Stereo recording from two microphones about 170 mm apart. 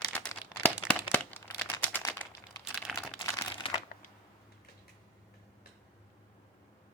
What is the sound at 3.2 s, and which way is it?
Crumpling, 20° left (ahead or behind).